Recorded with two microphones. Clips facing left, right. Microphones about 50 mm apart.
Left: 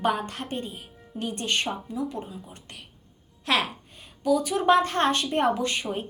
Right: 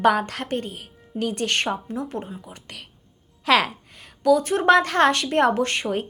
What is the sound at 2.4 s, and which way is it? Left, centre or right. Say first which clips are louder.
Speech: right 3 dB; right.